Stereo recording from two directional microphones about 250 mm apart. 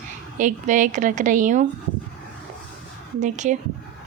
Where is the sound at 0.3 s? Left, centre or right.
Right.